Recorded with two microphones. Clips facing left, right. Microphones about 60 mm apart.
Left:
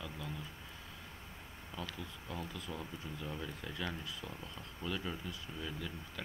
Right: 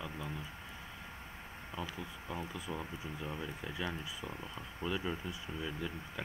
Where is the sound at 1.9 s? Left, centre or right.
Right.